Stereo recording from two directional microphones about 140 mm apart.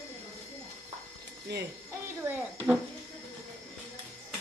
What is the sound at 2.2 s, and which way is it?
Speech, 15° right (ahead or behind).